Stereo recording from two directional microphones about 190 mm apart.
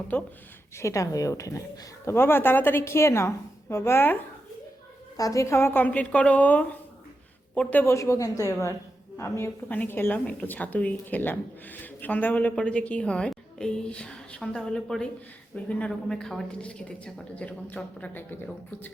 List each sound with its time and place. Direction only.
0.8 s a woman's voice: 15° left (ahead or behind)